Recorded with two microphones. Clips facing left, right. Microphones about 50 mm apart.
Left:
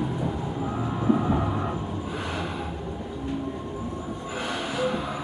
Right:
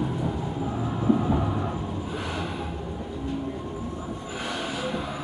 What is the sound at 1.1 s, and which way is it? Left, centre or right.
Train, left.